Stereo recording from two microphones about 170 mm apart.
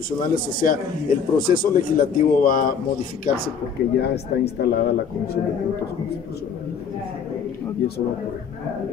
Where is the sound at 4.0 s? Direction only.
70° left (ahead or behind).